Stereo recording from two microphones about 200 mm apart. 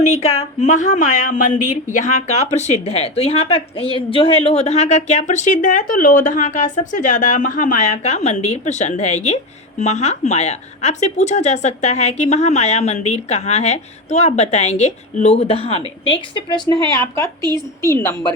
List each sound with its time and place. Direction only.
0.0 s a woman's voice: 35° left (ahead or behind)
16.9 s a woman's voice: 15° left (ahead or behind)
17.4 s a woman's voice: 20° right (ahead or behind)
17.9 s a woman's voice: 15° left (ahead or behind)